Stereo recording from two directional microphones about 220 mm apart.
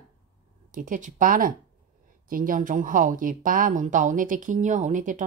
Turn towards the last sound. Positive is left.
turn(degrees=-35)  # may be behind; listen again after turning